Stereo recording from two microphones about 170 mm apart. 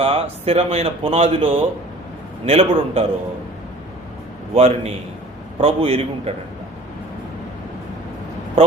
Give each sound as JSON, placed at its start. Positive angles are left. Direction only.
{"t": 0.0, "sound": "speech", "side_deg": -35}
{"t": 4.5, "sound": "speech", "side_deg": -35}